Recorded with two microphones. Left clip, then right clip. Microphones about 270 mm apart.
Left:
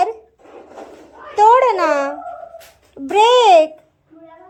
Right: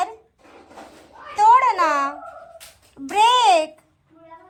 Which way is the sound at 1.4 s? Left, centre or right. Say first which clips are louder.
Left 3 dB; centre.